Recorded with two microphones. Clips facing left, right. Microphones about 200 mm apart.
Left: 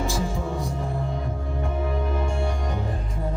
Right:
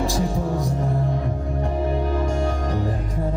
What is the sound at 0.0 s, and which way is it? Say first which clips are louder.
Music: right 4 dB; 35° right (ahead or behind).